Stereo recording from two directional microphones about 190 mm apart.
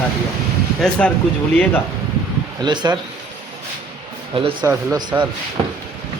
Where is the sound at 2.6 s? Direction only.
25° right (ahead or behind).